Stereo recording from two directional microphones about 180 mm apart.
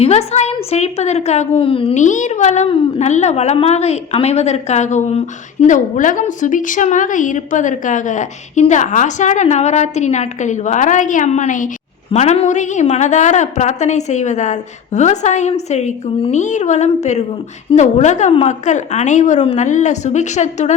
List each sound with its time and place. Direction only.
0.0 s a woman's voice: 35° left (ahead or behind)